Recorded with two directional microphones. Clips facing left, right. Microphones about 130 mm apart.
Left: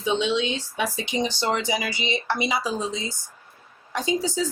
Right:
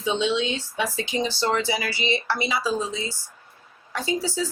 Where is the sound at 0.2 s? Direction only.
15° left (ahead or behind).